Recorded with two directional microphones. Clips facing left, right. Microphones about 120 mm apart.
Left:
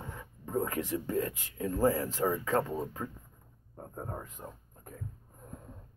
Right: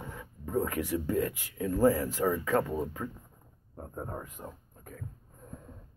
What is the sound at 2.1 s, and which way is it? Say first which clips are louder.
Speech: right 2 dB; 15° left (ahead or behind).